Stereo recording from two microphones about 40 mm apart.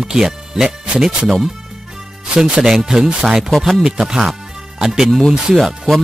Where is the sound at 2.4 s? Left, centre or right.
Centre.